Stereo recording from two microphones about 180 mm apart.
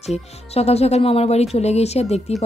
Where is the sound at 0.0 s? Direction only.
35° left (ahead or behind).